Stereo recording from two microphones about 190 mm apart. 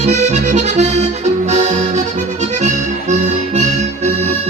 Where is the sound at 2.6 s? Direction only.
40° right (ahead or behind).